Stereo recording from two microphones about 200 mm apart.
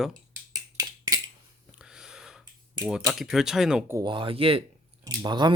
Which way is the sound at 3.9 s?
25° right (ahead or behind).